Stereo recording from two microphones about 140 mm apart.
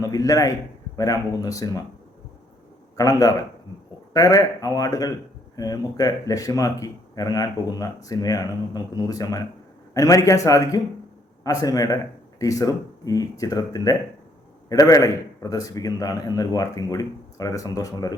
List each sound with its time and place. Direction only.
0.0 s speech: 25° left (ahead or behind)
3.0 s speech: 25° left (ahead or behind)